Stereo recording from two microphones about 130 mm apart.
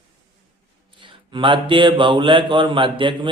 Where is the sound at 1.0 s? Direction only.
40° right (ahead or behind).